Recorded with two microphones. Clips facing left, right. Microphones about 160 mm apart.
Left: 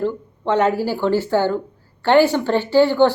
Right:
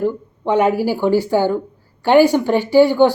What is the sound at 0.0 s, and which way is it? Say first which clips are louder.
A woman's voice: right 2 dB; 10° right (ahead or behind).